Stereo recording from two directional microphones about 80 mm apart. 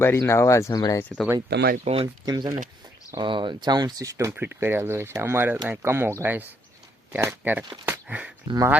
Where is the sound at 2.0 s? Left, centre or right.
Right.